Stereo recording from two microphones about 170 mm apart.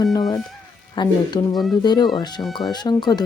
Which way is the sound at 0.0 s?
20° left (ahead or behind).